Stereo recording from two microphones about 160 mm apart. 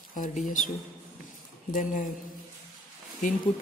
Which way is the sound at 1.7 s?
55° left (ahead or behind).